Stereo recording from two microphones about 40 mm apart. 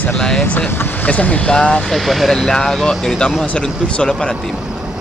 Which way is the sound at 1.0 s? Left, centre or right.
Left.